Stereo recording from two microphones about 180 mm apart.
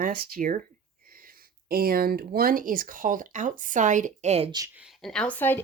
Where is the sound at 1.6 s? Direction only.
55° right (ahead or behind); by 4.5 s 40° right (ahead or behind).